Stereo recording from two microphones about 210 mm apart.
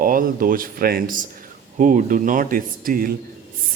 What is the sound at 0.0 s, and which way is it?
Speech, 40° right (ahead or behind).